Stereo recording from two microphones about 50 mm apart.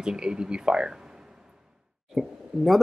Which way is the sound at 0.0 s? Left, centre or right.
Centre.